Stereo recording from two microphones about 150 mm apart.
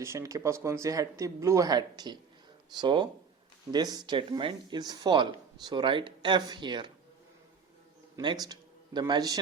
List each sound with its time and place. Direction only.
0.0 s speech: 20° right (ahead or behind)
8.1 s speech: 30° right (ahead or behind)